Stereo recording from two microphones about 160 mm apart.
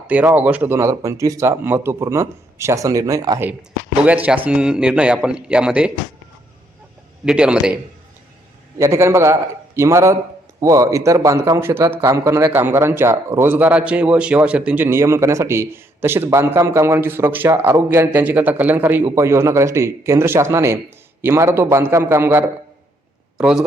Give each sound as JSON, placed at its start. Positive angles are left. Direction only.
{"t": 0.1, "sound": "a man's voice", "side_deg": -10}
{"t": 4.0, "sound": "a man's voice", "side_deg": -10}
{"t": 7.3, "sound": "a man's voice", "side_deg": -5}
{"t": 8.8, "sound": "a man's voice", "side_deg": -15}